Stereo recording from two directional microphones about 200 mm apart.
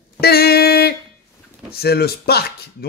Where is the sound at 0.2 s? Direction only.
50° left (ahead or behind).